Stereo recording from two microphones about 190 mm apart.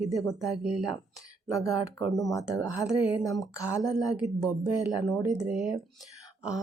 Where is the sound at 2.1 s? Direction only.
15° left (ahead or behind).